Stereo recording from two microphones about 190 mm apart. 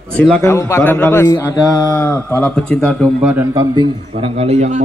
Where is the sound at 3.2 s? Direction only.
10° right (ahead or behind); by 4.8 s 35° right (ahead or behind).